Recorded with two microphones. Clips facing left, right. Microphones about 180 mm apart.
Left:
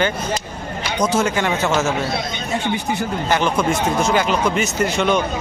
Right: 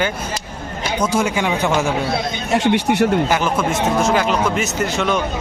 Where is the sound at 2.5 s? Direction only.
75° right (ahead or behind).